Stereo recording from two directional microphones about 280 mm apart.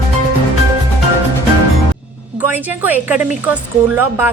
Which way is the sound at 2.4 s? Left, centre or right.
Centre.